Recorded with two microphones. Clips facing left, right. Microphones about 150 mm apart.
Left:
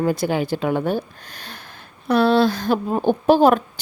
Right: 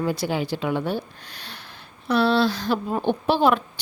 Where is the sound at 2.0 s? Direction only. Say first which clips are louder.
Left 4 dB; 50° left (ahead or behind).